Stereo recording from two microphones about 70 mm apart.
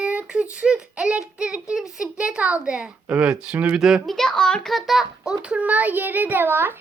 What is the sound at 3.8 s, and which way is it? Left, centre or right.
A child's voice, centre.